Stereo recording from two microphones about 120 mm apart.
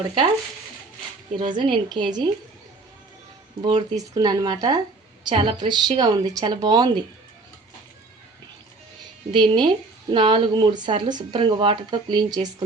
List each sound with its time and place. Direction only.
1.4 s speech: 40° right (ahead or behind)
3.6 s speech: 45° right (ahead or behind)
3.9 s speech: 35° right (ahead or behind)
9.3 s speech: 40° right (ahead or behind)